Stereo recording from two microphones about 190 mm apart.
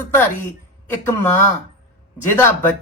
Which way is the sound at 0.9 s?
15° left (ahead or behind).